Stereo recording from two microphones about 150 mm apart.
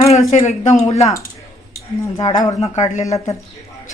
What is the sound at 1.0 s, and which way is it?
Speech, 20° left (ahead or behind).